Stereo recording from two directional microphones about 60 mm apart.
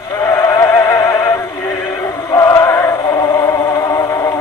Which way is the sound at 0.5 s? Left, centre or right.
Left.